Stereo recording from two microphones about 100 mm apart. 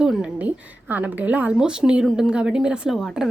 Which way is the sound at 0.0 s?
10° right (ahead or behind).